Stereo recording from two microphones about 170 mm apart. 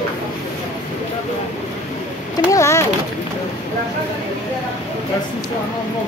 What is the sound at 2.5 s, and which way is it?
Speech, 15° left (ahead or behind).